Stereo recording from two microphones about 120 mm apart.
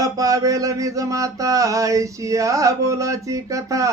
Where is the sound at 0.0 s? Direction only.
30° right (ahead or behind).